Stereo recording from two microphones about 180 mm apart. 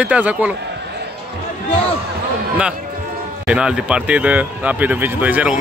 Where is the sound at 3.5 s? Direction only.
5° right (ahead or behind).